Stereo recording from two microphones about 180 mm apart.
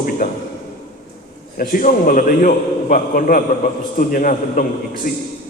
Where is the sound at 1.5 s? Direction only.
50° left (ahead or behind).